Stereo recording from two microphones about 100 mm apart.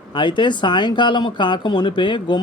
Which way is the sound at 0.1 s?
55° left (ahead or behind).